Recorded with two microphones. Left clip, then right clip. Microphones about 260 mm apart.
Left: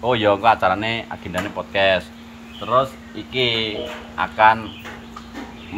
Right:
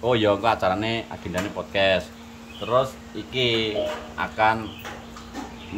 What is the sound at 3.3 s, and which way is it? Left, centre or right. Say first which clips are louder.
Speech: left 2 dB; centre.